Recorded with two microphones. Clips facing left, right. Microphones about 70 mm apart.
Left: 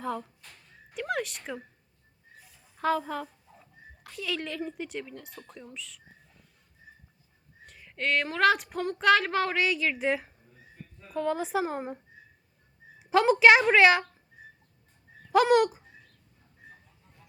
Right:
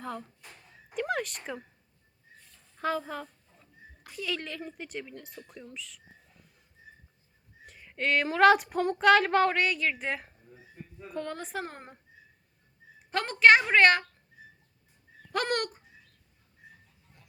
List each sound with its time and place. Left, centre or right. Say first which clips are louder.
0.0 s speech: left 5 dB; centre
0.4 s a sound: right 2 dB; centre
0.9 s speech: even; centre
2.4 s a sound: left 3 dB; centre
4.0 s speech: left 1 dB; centre
7.6 s speech: even; centre
10.5 s a sound: right 4 dB; centre
11.1 s speech: left 7 dB; centre
13.0 s speech: left 3 dB; centre
15.3 s speech: left 9 dB; centre